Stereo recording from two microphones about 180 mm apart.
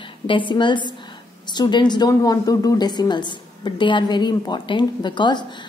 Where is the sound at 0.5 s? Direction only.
25° left (ahead or behind).